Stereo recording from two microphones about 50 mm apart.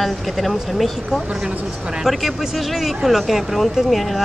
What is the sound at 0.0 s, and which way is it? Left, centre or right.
A woman's voice, centre.